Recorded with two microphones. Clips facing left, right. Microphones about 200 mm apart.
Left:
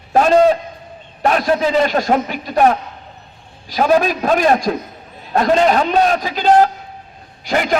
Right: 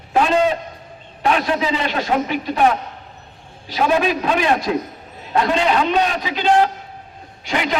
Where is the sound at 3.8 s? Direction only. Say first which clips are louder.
Left 3 dB; 40° left (ahead or behind).